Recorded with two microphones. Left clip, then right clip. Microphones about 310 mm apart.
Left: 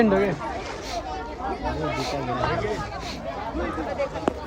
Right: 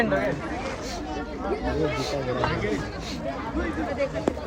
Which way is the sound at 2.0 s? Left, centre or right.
Left.